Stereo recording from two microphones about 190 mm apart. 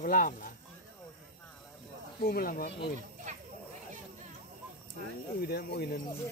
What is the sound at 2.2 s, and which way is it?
Speech, 50° left (ahead or behind).